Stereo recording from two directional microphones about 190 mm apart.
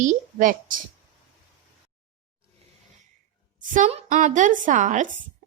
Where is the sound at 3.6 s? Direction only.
40° right (ahead or behind).